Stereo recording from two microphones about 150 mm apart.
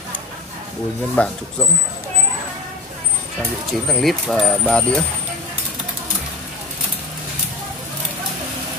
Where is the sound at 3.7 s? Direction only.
Centre (ahead or behind).